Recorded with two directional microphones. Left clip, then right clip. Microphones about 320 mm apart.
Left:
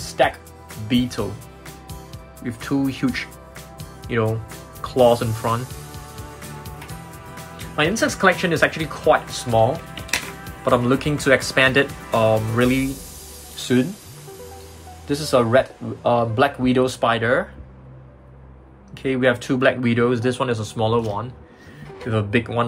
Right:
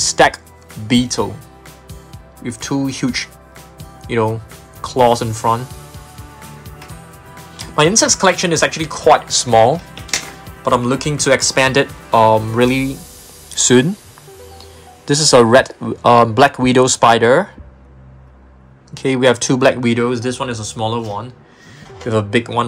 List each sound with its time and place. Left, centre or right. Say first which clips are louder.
0.8 s speech: right 6 dB; centre
2.4 s speech: right 3 dB; centre
3.7 s music: right 5 dB; centre
7.5 s speech: right 8 dB; centre
13.6 s speech: right 9 dB; right
15.0 s speech: right 9 dB; right
18.9 s speech: right 6 dB; centre